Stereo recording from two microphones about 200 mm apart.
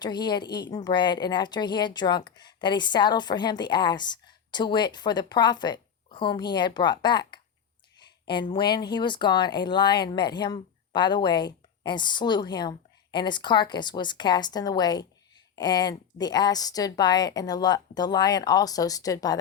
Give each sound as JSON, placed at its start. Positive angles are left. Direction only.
{"t": 0.0, "sound": "speech", "side_deg": 20}